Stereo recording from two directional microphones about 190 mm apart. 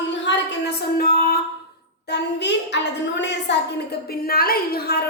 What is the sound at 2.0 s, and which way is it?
A child's voice, 65° left (ahead or behind).